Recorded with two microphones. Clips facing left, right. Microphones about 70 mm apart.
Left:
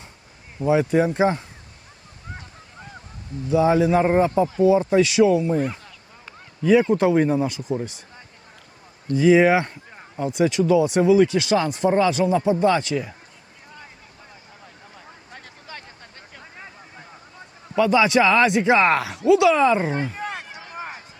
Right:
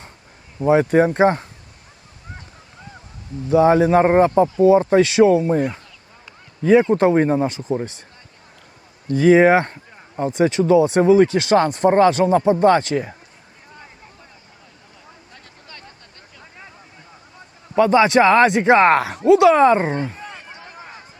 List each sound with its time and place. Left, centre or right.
0.6 s speech: right
3.5 s speech: right
9.1 s speech: right
17.7 s speech: right
20.1 s a sound: left